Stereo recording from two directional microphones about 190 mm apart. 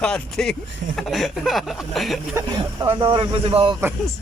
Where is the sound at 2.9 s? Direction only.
25° right (ahead or behind).